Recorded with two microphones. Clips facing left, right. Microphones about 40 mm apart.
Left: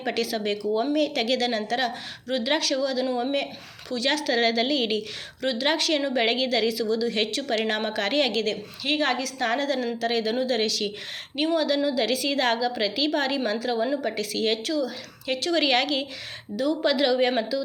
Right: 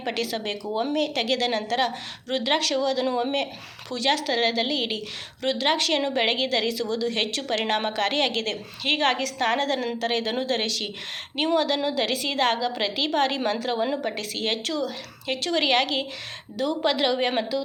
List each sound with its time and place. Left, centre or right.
0.1 s a woman's voice: right
2.3 s a woman's voice: right
4.1 s a woman's voice: centre
5.4 s speech: right
6.1 s a woman's voice: right
7.0 s a woman's voice: right
8.3 s a woman's voice: right
10.6 s a woman's voice: right
11.3 s speech: right
11.9 s a woman's voice: right